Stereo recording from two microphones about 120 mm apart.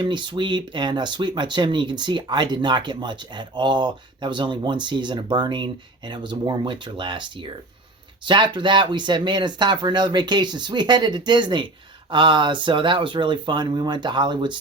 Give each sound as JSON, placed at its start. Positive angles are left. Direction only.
{"t": 0.0, "sound": "speech", "side_deg": -40}